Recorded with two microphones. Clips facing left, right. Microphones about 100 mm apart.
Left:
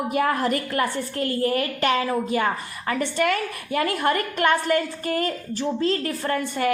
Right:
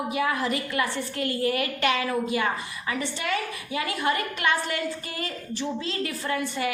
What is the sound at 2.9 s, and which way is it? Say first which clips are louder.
A woman's voice: left 6 dB; 55° left (ahead or behind).